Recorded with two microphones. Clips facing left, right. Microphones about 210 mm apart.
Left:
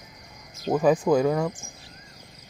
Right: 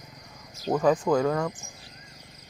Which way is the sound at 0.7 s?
10° left (ahead or behind).